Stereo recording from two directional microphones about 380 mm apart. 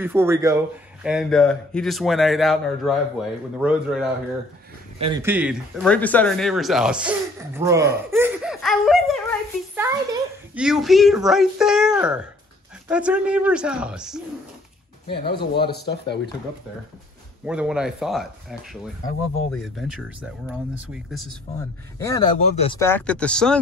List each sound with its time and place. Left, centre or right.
0.0 s speech: centre
15.5 s speech: left
17.5 s speech: centre